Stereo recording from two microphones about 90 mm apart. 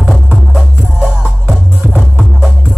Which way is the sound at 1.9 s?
Centre (ahead or behind).